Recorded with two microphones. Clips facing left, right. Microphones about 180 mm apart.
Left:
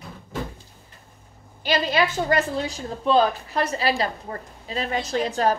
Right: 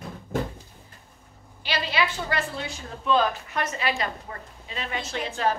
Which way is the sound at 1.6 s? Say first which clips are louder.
Left 5 dB; 45° left (ahead or behind).